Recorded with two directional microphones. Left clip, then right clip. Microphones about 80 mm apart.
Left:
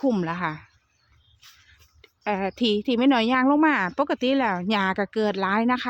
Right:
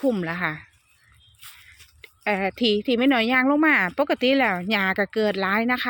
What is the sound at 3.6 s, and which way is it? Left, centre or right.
Speech, centre.